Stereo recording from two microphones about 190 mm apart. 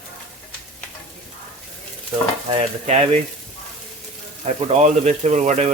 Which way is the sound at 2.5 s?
35° right (ahead or behind).